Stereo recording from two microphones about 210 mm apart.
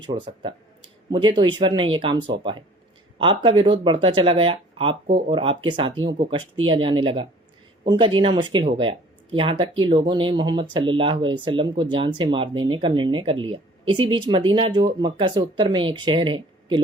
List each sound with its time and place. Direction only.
0.0 s speech: 20° right (ahead or behind)